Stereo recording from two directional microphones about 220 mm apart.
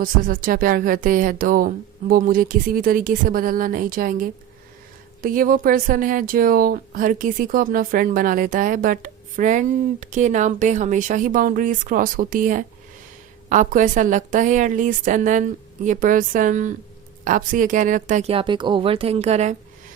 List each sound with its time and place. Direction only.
0.0 s speech: 40° right (ahead or behind)